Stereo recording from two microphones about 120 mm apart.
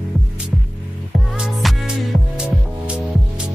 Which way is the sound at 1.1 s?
5° right (ahead or behind).